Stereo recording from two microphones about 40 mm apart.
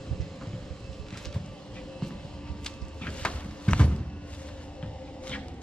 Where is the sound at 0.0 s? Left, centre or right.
Centre.